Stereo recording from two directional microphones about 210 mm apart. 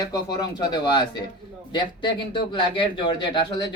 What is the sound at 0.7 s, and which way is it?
Speech, 20° left (ahead or behind).